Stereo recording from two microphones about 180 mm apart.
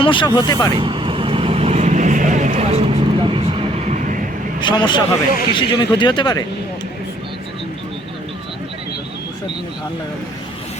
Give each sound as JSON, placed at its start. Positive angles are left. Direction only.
{"t": 0.0, "sound": "speech", "side_deg": 25}
{"t": 0.7, "sound": "vehicle", "side_deg": -30}
{"t": 4.6, "sound": "speech", "side_deg": 25}